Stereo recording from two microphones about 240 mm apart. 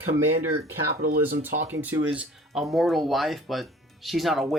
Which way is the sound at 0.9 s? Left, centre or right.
Right.